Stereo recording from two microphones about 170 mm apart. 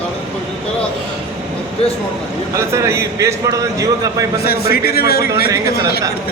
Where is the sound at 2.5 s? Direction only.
15° right (ahead or behind).